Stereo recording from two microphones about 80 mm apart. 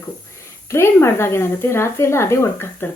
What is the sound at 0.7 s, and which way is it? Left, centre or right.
Speech, left.